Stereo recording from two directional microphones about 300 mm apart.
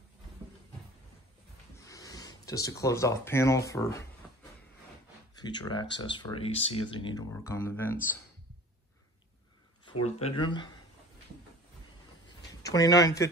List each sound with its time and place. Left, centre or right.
1.9 s speech: centre
5.4 s speech: centre
10.0 s speech: centre
12.6 s speech: centre